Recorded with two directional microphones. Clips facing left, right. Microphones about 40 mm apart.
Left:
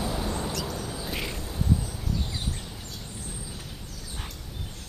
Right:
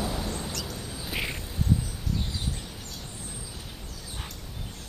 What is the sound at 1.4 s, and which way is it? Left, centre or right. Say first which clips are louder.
Duck: left 1 dB; centre.